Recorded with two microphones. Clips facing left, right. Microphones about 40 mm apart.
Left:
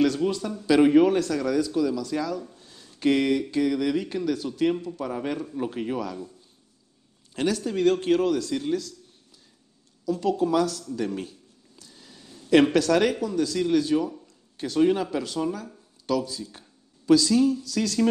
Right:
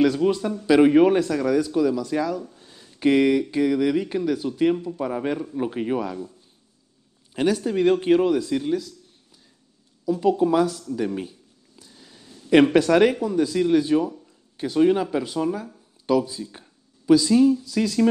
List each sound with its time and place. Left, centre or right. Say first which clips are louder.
0.0 s speech: right 4 dB; centre
7.3 s speech: right 4 dB; centre
10.0 s a sound: right 4 dB; centre
12.7 s speech: right 4 dB; centre